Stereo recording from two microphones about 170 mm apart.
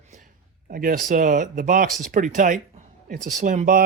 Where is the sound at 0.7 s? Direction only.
55° right (ahead or behind).